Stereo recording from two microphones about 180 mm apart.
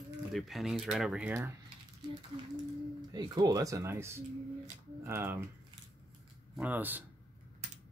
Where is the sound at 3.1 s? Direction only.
20° right (ahead or behind).